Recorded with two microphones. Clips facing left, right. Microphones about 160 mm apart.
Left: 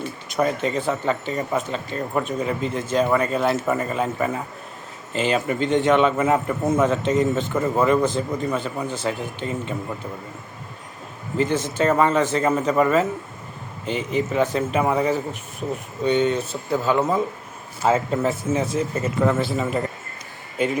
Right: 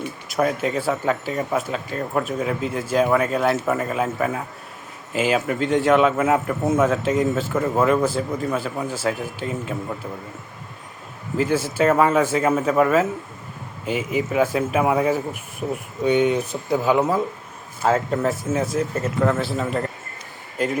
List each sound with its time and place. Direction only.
0.0 s a man's voice: centre (ahead or behind)
11.3 s a man's voice: 5° right (ahead or behind)
17.8 s a man's voice: centre (ahead or behind)